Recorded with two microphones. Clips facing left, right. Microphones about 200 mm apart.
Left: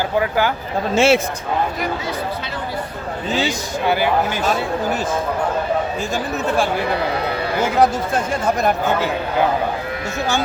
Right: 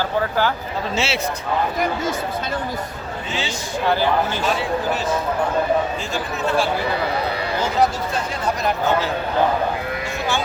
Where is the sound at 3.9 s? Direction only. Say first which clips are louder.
Left 1 dB; 10° left (ahead or behind).